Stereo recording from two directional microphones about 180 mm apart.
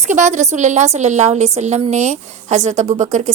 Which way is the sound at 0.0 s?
40° right (ahead or behind).